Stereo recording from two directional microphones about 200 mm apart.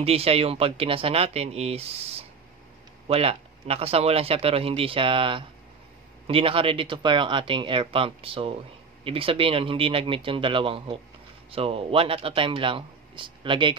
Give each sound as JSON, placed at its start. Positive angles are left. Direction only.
{"t": 0.0, "sound": "speech", "side_deg": -30}